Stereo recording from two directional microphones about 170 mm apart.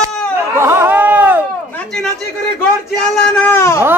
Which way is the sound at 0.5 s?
15° right (ahead or behind).